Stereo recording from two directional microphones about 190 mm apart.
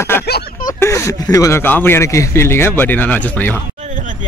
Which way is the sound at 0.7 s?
15° left (ahead or behind).